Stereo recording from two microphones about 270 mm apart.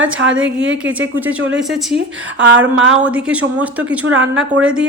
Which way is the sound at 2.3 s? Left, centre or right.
Right.